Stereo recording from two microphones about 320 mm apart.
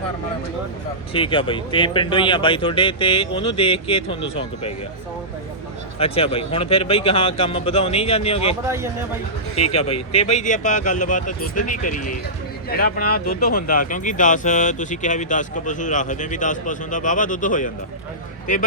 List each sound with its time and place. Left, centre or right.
1.1 s speech: centre
6.0 s speech: centre
8.6 s speech: centre
9.6 s speech: centre